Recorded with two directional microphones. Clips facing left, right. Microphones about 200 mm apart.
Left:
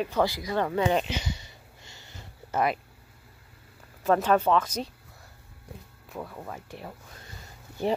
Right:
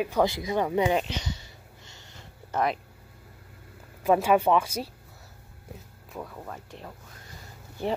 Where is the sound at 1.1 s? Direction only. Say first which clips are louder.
Left 1 dB; 5° left (ahead or behind).